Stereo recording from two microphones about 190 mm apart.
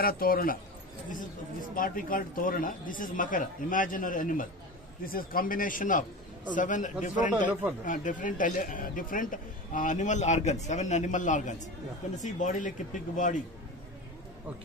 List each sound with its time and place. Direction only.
0.0 s a man's voice: 50° left (ahead or behind)